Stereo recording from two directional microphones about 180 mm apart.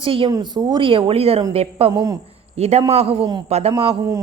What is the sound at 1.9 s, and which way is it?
Speech, 20° right (ahead or behind).